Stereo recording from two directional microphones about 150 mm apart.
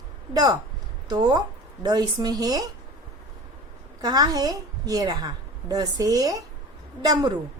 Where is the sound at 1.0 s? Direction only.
25° right (ahead or behind).